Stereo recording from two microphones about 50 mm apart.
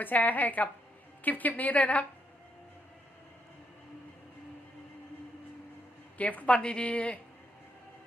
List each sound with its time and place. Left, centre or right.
0.0 s a woman's voice: left
6.1 s speech: left